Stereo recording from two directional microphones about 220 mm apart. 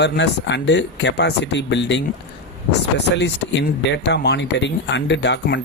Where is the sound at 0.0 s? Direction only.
55° left (ahead or behind).